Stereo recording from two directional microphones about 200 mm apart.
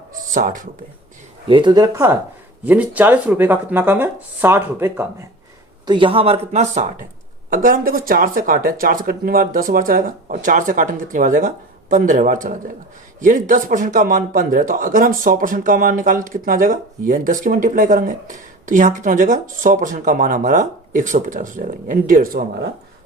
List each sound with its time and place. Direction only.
0.1 s a sound: 40° right (ahead or behind)
1.5 s speech: 25° right (ahead or behind)
5.8 s speech: 25° right (ahead or behind)
7.5 s a man's voice: 45° right (ahead or behind)